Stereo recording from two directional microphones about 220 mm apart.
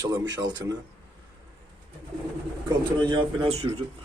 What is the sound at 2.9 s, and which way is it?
Speech, 20° right (ahead or behind).